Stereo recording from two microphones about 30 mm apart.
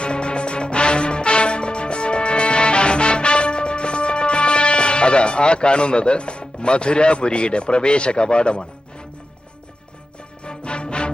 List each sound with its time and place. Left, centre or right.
0.0 s music: left
10.4 s music: left